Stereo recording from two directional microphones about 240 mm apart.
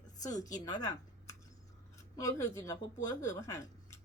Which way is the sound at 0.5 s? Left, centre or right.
Centre.